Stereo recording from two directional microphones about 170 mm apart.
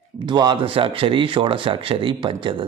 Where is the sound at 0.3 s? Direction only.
25° right (ahead or behind).